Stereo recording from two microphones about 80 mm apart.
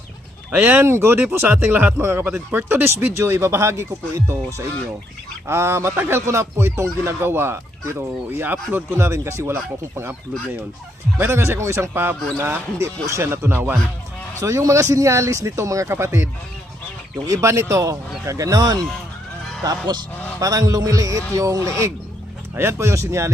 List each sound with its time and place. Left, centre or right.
0.5 s speech: right
2.0 s speech: right
11.2 s speech: right
14.3 s speech: right
17.2 s a man's voice: right
20.4 s a man's voice: right